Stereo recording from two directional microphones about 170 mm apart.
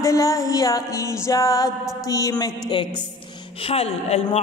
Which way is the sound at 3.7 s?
35° left (ahead or behind).